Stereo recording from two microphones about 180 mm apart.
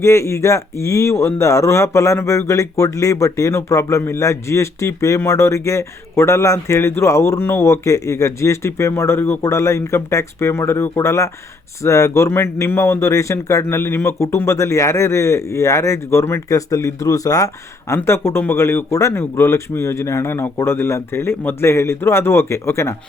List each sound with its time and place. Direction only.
0.0 s speech: 15° left (ahead or behind)